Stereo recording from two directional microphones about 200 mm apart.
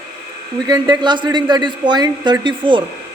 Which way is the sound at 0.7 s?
20° right (ahead or behind).